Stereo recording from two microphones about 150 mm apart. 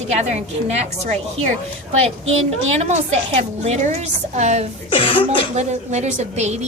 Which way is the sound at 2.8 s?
45° right (ahead or behind).